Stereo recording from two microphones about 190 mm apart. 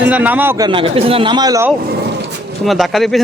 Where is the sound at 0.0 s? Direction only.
10° right (ahead or behind).